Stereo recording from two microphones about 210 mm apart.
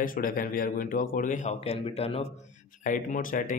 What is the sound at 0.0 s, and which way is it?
Speech, 40° left (ahead or behind).